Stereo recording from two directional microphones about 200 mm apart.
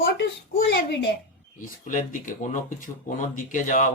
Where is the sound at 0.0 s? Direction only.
50° left (ahead or behind).